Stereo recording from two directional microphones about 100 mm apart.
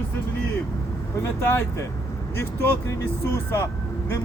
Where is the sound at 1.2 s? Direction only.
25° left (ahead or behind).